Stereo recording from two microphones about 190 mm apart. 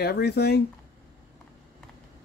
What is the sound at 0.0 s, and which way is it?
Speech, 55° left (ahead or behind).